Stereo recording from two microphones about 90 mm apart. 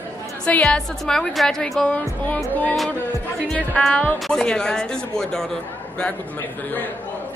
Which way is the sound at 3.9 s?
20° left (ahead or behind).